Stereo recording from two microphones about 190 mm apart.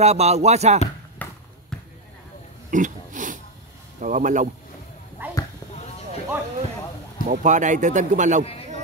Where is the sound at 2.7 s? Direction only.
40° right (ahead or behind).